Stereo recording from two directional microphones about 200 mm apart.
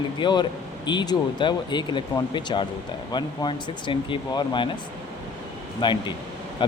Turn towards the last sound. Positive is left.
turn(degrees=25)  # may be behind; listen again after turning